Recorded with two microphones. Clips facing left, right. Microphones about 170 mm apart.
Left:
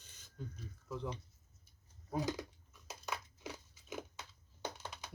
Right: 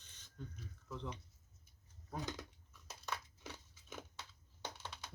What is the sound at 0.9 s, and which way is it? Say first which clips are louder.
Speech: left 5 dB; 10° left (ahead or behind).